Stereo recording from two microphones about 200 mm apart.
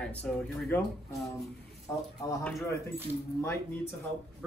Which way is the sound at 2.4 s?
Centre (ahead or behind).